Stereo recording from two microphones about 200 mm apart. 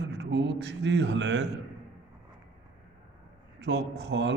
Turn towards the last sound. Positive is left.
turn(degrees=-60)  # may be behind; listen again after turning